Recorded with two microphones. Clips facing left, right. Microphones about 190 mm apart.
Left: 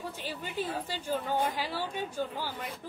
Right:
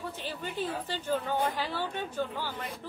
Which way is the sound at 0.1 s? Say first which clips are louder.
Right 1 dB; 10° left (ahead or behind).